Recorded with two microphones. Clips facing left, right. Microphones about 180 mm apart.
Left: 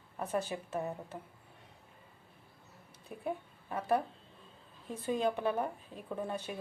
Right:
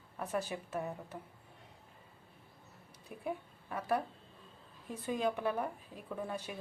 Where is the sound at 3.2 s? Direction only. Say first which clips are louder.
Left 2 dB; 25° left (ahead or behind).